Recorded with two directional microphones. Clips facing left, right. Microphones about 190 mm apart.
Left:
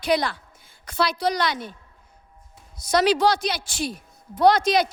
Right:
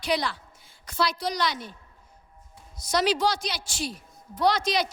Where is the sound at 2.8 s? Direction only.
60° left (ahead or behind).